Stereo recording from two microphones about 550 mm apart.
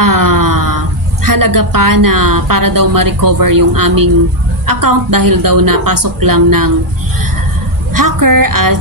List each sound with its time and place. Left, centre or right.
0.0 s a woman's voice: right
7.9 s a woman's voice: right